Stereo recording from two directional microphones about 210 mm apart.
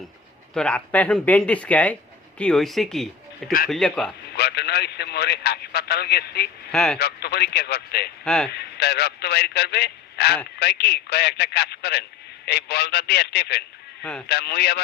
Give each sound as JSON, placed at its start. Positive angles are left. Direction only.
{"t": 0.5, "sound": "speech", "side_deg": 5}
{"t": 4.4, "sound": "speech", "side_deg": 50}
{"t": 6.7, "sound": "speech", "side_deg": 5}
{"t": 7.0, "sound": "speech", "side_deg": 50}
{"t": 8.2, "sound": "a man's voice", "side_deg": 5}
{"t": 8.5, "sound": "speech", "side_deg": 50}
{"t": 14.0, "sound": "speech", "side_deg": 5}
{"t": 14.3, "sound": "speech", "side_deg": 50}